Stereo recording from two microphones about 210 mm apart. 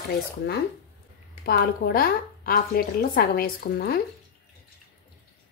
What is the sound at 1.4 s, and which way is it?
A woman's voice, 50° left (ahead or behind).